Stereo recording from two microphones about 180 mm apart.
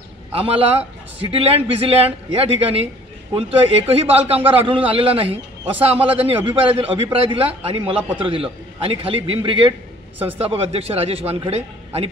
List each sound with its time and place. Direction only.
0.3 s a man's voice: 30° right (ahead or behind)